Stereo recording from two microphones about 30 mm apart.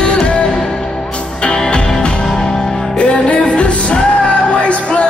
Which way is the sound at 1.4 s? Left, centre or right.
Left.